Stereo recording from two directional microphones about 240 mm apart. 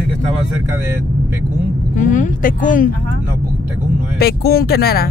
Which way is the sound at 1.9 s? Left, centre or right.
Left.